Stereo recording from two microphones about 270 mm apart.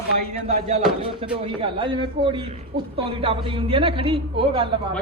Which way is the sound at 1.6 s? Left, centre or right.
Centre.